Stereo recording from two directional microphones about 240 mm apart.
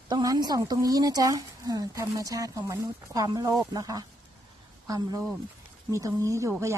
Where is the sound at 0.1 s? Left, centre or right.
Centre.